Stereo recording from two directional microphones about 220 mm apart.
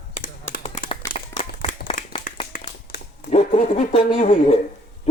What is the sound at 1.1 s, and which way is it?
Clapping, 40° left (ahead or behind).